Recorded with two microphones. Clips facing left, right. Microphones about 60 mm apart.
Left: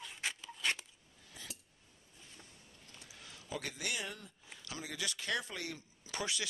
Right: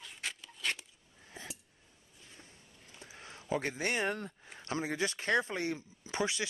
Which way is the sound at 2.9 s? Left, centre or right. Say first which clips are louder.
Right 5 dB; right.